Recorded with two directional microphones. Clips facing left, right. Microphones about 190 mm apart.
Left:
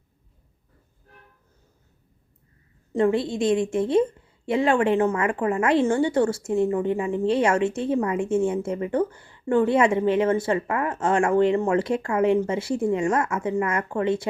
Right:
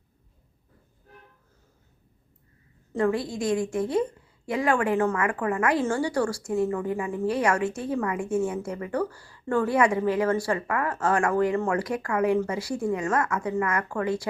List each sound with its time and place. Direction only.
2.9 s a woman's voice: 25° left (ahead or behind)